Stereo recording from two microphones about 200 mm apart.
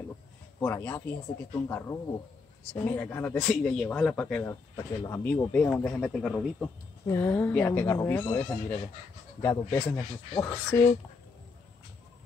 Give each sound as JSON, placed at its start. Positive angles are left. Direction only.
{"t": 0.6, "sound": "speech", "side_deg": 10}